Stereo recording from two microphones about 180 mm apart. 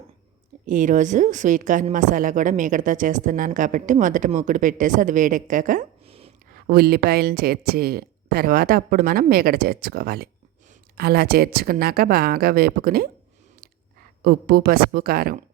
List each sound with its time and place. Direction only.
0.6 s a woman's voice: 45° right (ahead or behind)
6.1 s a sound: 30° right (ahead or behind)
6.7 s speech: 60° right (ahead or behind)
14.2 s speech: 55° right (ahead or behind)